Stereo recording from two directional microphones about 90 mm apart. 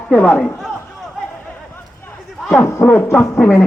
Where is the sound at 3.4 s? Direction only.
10° left (ahead or behind).